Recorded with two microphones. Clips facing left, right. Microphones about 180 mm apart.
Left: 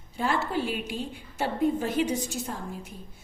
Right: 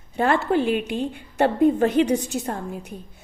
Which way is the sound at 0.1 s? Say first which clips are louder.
Right 8 dB; 60° right (ahead or behind).